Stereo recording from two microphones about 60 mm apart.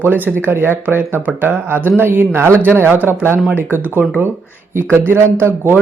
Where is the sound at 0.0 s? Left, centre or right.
Right.